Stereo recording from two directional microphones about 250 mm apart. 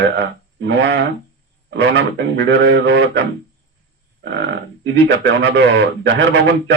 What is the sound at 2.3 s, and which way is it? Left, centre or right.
Speech, right.